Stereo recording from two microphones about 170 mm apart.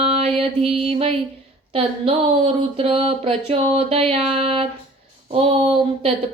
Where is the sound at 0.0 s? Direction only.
35° right (ahead or behind).